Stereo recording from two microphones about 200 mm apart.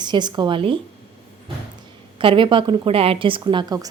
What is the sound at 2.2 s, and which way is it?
A woman's voice, 25° right (ahead or behind).